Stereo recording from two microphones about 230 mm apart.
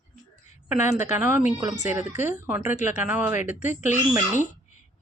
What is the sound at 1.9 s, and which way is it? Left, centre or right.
Speech, centre.